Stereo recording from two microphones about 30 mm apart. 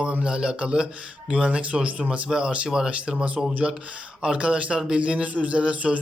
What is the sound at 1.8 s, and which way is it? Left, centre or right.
Speech, right.